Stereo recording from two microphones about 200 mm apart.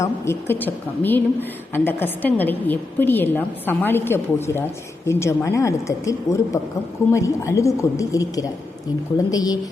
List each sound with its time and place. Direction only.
0.0 s a woman's voice: 10° left (ahead or behind)